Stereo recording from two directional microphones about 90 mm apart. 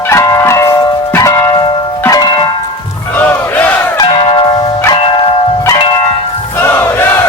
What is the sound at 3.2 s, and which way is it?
Battle cry, 20° left (ahead or behind).